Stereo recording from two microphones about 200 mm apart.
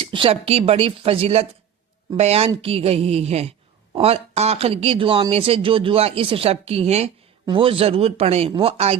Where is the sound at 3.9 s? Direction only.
30° right (ahead or behind).